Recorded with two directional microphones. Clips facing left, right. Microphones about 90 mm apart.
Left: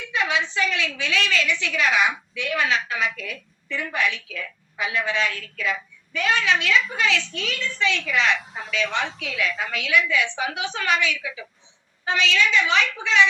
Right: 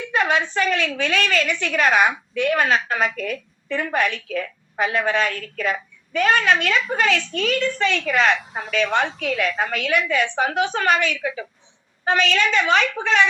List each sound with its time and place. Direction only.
0.1 s a woman's voice: 45° right (ahead or behind)